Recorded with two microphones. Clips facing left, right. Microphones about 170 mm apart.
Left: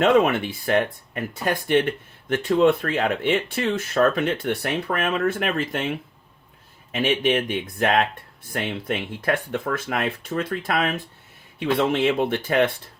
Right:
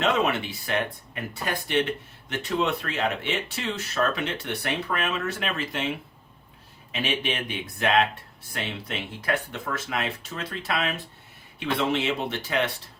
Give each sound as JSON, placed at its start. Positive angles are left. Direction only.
{"t": 0.0, "sound": "speech", "side_deg": 50}
{"t": 6.9, "sound": "speech", "side_deg": 50}